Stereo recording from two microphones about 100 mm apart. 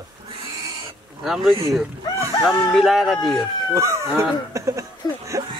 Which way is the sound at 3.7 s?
30° right (ahead or behind).